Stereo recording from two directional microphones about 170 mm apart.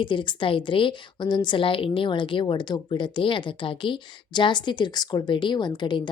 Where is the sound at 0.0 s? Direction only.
30° left (ahead or behind).